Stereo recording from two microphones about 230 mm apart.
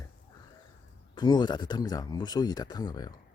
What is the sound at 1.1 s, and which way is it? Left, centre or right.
Speech, centre.